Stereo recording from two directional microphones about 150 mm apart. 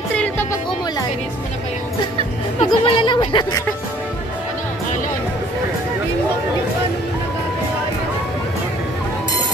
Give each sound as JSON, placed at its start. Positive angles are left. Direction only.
{"t": 0.1, "sound": "music", "side_deg": 10}
{"t": 2.6, "sound": "speech", "side_deg": 35}